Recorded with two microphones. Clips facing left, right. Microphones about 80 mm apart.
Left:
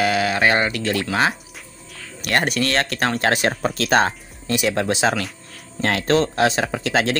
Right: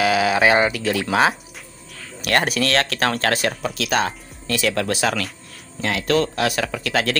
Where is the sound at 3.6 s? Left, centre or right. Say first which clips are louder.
Left 4 dB; left.